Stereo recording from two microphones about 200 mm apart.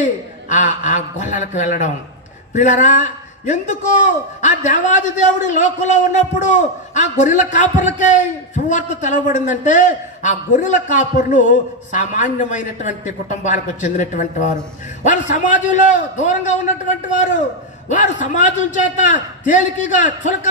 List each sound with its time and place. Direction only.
0.0 s a man's voice: 40° left (ahead or behind)